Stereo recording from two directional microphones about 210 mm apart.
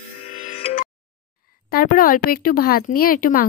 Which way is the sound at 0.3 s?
35° left (ahead or behind).